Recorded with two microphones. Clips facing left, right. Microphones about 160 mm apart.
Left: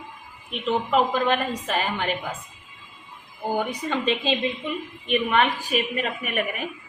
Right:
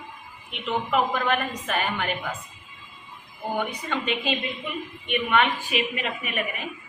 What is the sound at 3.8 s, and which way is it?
A woman's voice, 30° left (ahead or behind).